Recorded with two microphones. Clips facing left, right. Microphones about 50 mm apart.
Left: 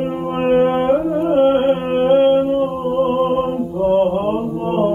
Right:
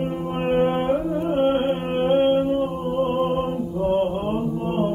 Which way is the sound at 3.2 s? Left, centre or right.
Left.